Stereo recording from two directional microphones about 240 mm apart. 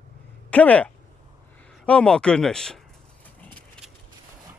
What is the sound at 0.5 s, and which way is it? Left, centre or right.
Speech, centre.